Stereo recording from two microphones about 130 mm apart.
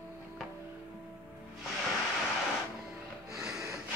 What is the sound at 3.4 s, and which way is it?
Snort, 5° right (ahead or behind).